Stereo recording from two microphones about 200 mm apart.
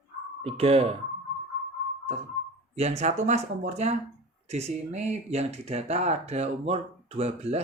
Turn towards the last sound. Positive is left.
turn(degrees=-30)  # may be behind; listen again after turning